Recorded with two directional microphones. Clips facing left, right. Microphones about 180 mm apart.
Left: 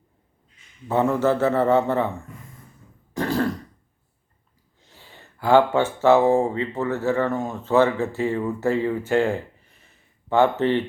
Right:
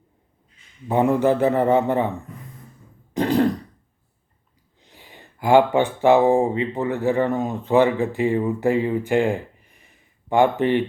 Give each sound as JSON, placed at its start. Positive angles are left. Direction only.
{"t": 0.9, "sound": "a man's voice", "side_deg": -15}
{"t": 3.2, "sound": "throat clearing", "side_deg": -20}
{"t": 4.8, "sound": "speech", "side_deg": -15}